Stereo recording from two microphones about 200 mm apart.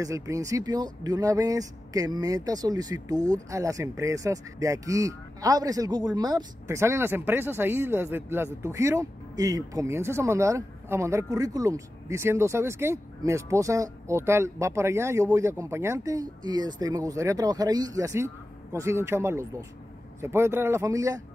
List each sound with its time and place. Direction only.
0.0 s speech: 15° right (ahead or behind)